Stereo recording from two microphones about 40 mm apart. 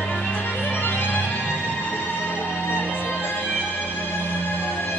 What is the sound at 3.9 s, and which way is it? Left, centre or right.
Music, left.